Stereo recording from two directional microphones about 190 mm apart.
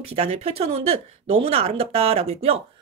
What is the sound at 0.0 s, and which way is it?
Speech, 30° right (ahead or behind).